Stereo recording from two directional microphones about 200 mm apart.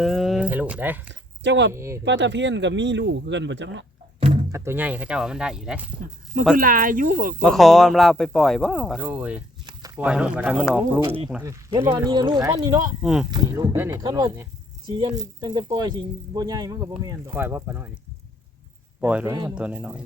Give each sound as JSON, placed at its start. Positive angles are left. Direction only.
{"t": 0.0, "sound": "a sound", "side_deg": 0}
{"t": 1.5, "sound": "speech", "side_deg": -60}
{"t": 1.7, "sound": "speech", "side_deg": -15}
{"t": 2.0, "sound": "speech", "side_deg": -60}
{"t": 4.2, "sound": "music", "side_deg": -30}
{"t": 4.5, "sound": "speech", "side_deg": -10}
{"t": 6.6, "sound": "speech", "side_deg": -45}
{"t": 7.4, "sound": "speech", "side_deg": 0}
{"t": 11.0, "sound": "speech", "side_deg": -30}
{"t": 11.4, "sound": "speech", "side_deg": -15}
{"t": 13.0, "sound": "speech", "side_deg": -5}
{"t": 13.3, "sound": "speech", "side_deg": -20}
{"t": 18.9, "sound": "speech", "side_deg": -5}